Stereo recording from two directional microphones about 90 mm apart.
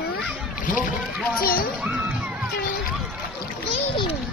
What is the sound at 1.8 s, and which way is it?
Music, 10° right (ahead or behind).